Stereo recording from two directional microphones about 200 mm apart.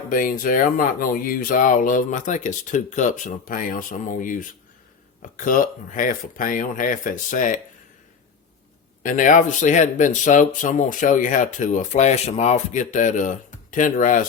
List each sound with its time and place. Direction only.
0.1 s speech: 45° left (ahead or behind)
9.0 s speech: 40° left (ahead or behind)